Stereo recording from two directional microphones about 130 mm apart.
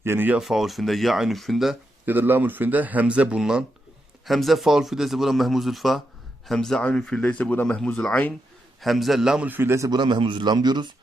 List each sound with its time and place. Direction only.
0.0 s speech: 15° right (ahead or behind)
0.4 s a man's voice: centre (ahead or behind)
2.0 s a man's voice: 15° right (ahead or behind)
9.5 s a man's voice: 15° right (ahead or behind); by 10.9 s 35° right (ahead or behind)